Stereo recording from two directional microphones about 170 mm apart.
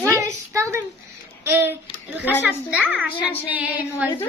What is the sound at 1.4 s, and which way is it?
Child singing, 15° right (ahead or behind).